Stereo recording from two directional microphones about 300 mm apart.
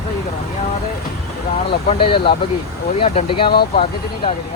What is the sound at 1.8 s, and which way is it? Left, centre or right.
Speech, centre.